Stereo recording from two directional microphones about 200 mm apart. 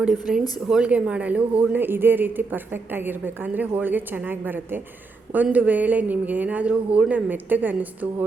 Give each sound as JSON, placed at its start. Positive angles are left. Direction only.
{"t": 0.3, "sound": "speech", "side_deg": -5}